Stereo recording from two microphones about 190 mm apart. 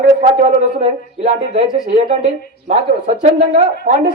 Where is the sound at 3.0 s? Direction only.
40° right (ahead or behind).